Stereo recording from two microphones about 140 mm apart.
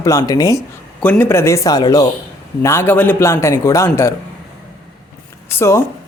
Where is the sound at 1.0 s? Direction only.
10° left (ahead or behind).